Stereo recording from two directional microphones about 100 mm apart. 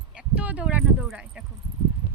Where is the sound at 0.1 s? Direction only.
10° right (ahead or behind).